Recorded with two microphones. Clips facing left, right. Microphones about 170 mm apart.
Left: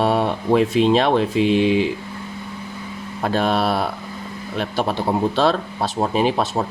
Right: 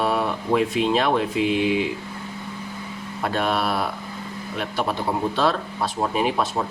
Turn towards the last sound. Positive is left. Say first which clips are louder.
# left 3 dB
turn(degrees=30)  # may be behind; listen again after turning